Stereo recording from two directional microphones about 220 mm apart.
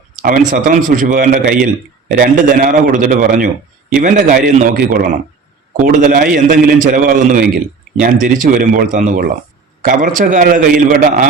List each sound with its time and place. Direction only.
0.2 s a man's voice: 40° right (ahead or behind)